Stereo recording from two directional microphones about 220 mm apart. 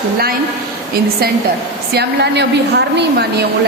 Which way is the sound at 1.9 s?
50° right (ahead or behind).